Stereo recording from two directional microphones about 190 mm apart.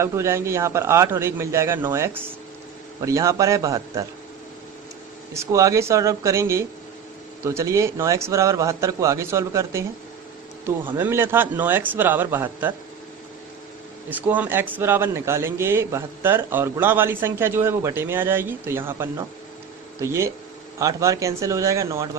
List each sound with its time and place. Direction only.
0.0 s a man's voice: 15° right (ahead or behind)
5.3 s a man's voice: 15° right (ahead or behind)
10.8 s a man's voice: 10° right (ahead or behind)
14.1 s a man's voice: 10° right (ahead or behind)